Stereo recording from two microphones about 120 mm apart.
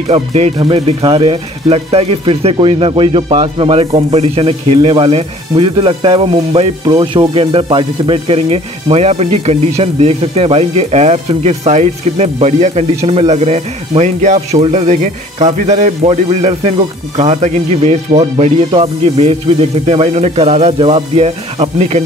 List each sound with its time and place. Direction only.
0.1 s speech: 60° right (ahead or behind)
0.6 s speech: 50° right (ahead or behind); by 22.0 s 65° right (ahead or behind)